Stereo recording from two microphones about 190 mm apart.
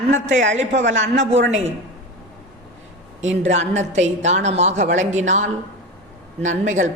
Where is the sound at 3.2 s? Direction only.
35° right (ahead or behind).